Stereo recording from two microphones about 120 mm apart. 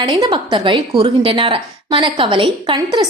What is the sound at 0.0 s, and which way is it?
A woman's voice, 35° right (ahead or behind).